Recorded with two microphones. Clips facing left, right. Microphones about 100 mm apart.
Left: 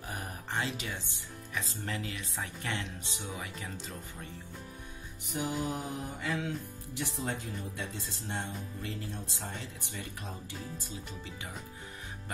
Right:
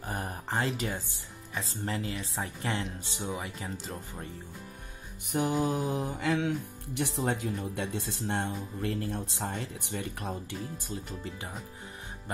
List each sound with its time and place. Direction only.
0.0 s music: 35° right (ahead or behind)
1.5 s speech: 35° right (ahead or behind)
5.3 s music: 75° right (ahead or behind); by 10.3 s 60° right (ahead or behind)